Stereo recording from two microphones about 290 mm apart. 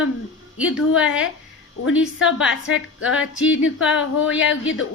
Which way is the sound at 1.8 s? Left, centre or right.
Left.